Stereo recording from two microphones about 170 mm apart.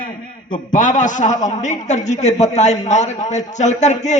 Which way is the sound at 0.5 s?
50° left (ahead or behind).